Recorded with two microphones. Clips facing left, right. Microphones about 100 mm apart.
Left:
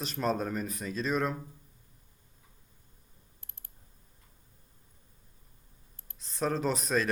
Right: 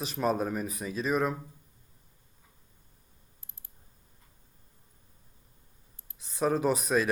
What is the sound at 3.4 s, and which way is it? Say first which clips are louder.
Clicking: left 1 dB; 60° left (ahead or behind).